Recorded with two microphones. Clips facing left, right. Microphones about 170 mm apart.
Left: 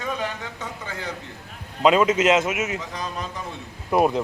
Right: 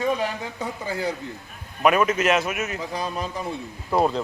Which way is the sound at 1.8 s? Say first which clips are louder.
Left 2 dB; 20° left (ahead or behind).